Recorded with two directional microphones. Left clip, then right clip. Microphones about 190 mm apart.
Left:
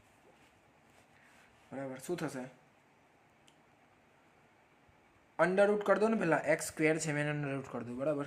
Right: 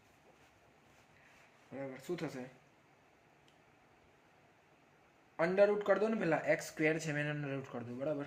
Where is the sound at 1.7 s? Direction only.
30° left (ahead or behind).